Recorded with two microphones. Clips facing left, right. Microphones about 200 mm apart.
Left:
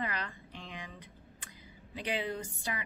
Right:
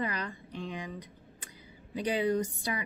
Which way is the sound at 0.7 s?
35° right (ahead or behind).